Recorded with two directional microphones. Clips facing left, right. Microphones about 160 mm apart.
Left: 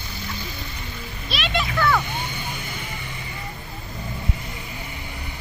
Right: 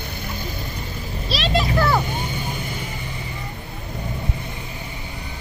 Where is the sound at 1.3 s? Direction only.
35° right (ahead or behind).